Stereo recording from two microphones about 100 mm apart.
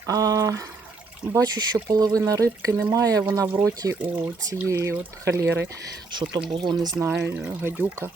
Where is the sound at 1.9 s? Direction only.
35° right (ahead or behind).